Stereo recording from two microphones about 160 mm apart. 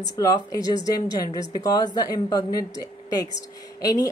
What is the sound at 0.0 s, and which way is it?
Speech, 20° left (ahead or behind).